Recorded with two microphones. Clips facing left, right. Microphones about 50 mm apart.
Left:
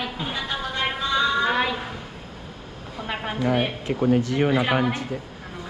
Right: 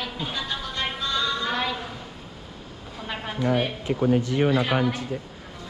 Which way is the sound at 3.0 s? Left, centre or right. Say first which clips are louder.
Left 1 dB; centre.